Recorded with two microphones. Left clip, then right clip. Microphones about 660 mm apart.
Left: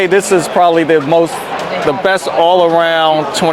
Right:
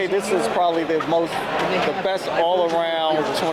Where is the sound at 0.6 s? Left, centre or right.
Left.